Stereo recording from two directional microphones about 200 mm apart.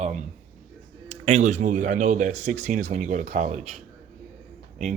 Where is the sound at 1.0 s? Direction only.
35° right (ahead or behind).